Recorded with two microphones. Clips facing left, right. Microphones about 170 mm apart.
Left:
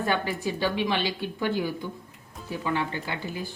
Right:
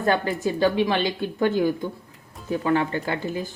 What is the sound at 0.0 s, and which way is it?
A woman's voice, 40° right (ahead or behind).